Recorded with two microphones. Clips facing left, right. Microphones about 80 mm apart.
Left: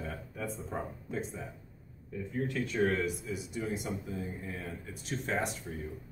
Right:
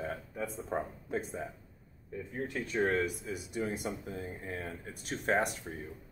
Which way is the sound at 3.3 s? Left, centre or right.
Right.